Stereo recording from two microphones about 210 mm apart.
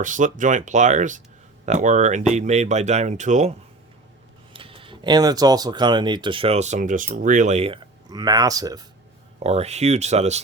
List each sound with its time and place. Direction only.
0.0 s speech: 40° right (ahead or behind)
4.5 s speech: 25° right (ahead or behind)
9.4 s speech: 30° right (ahead or behind)